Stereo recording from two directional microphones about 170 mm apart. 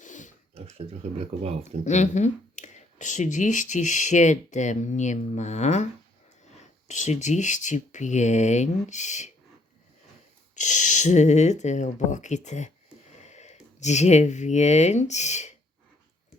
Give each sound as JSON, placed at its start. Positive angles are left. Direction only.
{"t": 0.0, "sound": "a sound", "side_deg": 45}
{"t": 0.5, "sound": "speech", "side_deg": -35}
{"t": 1.8, "sound": "speech", "side_deg": 45}
{"t": 10.5, "sound": "speech", "side_deg": 45}